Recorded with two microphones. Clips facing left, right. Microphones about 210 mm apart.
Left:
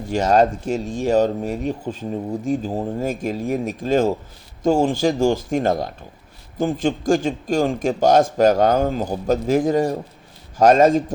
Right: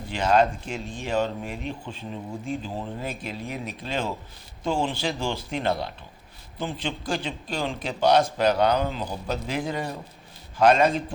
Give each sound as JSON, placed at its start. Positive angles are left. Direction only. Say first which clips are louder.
{"t": 0.1, "sound": "speech", "louder": "left 5 dB", "side_deg": 45}